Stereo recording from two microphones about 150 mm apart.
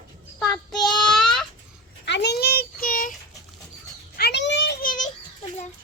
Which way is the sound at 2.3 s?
90° left.